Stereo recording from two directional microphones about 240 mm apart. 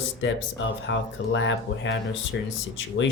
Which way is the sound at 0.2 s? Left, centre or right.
Left.